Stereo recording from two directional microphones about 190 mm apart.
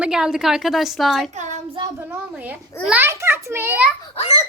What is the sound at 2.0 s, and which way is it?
A child's voice, 10° right (ahead or behind).